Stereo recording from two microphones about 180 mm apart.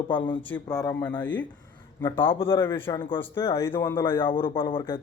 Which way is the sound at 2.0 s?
30° left (ahead or behind).